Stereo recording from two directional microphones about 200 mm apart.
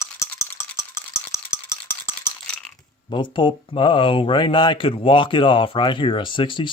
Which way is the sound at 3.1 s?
25° left (ahead or behind).